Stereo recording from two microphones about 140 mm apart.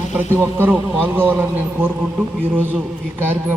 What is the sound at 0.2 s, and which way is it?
A man's voice, 15° right (ahead or behind).